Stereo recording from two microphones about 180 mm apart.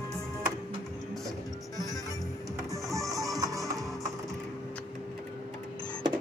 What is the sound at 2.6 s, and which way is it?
Music, 15° right (ahead or behind).